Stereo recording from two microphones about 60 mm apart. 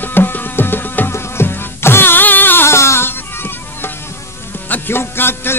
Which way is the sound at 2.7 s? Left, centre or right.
Left.